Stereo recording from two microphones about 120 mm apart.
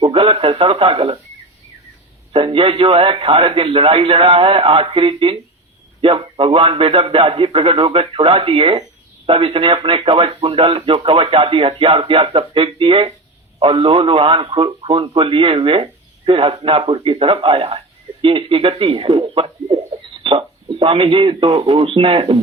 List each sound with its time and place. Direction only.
0.0 s speech: 50° right (ahead or behind)
2.3 s speech: 50° right (ahead or behind)